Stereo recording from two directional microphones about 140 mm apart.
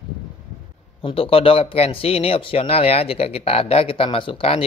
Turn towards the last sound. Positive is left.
turn(degrees=40)  # may be behind; listen again after turning